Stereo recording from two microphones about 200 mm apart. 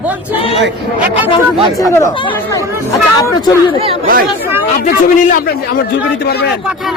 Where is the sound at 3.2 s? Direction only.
20° left (ahead or behind).